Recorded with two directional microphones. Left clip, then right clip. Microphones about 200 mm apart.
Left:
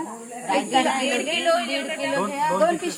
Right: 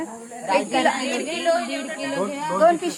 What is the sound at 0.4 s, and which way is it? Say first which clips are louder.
Speech: right 1 dB; 45° right (ahead or behind).